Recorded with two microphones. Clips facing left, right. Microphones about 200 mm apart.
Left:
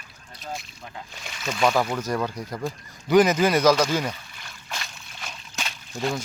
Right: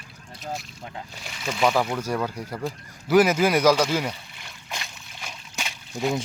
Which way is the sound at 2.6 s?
5° right (ahead or behind).